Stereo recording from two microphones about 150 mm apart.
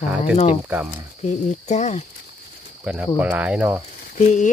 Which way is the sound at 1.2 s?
50° left (ahead or behind).